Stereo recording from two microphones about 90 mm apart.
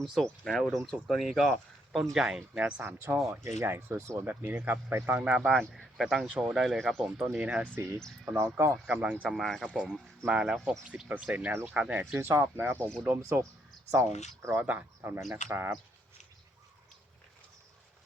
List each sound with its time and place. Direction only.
0.0 s speech: centre (ahead or behind)
3.4 s speech: 30° right (ahead or behind)
4.3 s speech: 20° right (ahead or behind)
5.4 s speech: 5° left (ahead or behind)
6.2 s speech: 15° right (ahead or behind)
6.5 s speech: centre (ahead or behind)
7.3 s speech: 15° right (ahead or behind)
7.8 s speech: 30° right (ahead or behind)
8.9 s speech: 15° right (ahead or behind)
9.4 s speech: 5° left (ahead or behind)
9.7 s speech: 10° right (ahead or behind)
12.2 s speech: 30° right (ahead or behind)
14.6 s speech: 20° right (ahead or behind)